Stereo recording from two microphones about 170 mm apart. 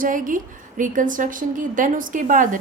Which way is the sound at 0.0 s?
50° right (ahead or behind).